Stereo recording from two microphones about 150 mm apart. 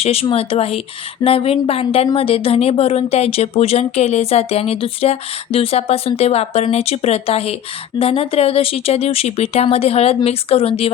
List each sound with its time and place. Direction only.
0.0 s speech: 40° left (ahead or behind)